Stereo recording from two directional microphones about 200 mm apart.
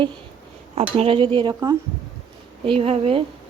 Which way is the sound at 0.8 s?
30° right (ahead or behind).